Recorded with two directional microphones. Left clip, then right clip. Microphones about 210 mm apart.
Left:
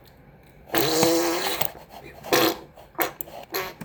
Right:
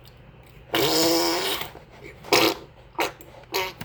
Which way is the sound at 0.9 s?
5° right (ahead or behind).